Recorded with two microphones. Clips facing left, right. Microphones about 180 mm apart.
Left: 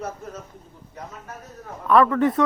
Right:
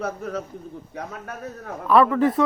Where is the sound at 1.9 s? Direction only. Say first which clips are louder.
Even; centre (ahead or behind).